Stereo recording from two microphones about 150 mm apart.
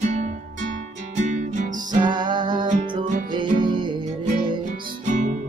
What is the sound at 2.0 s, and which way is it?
Music, 30° right (ahead or behind).